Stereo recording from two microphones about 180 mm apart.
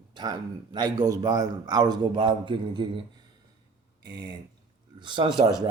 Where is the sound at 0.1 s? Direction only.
25° right (ahead or behind).